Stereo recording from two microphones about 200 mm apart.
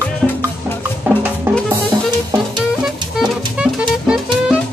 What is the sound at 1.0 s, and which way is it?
Music, 10° right (ahead or behind).